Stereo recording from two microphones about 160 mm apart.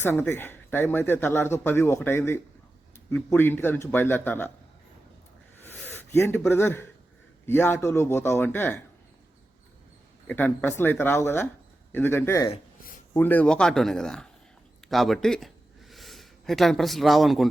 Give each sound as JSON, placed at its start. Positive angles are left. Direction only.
{"t": 0.0, "sound": "speech", "side_deg": 15}
{"t": 5.5, "sound": "a sound", "side_deg": 10}
{"t": 6.5, "sound": "speech", "side_deg": 15}
{"t": 10.2, "sound": "speech", "side_deg": 10}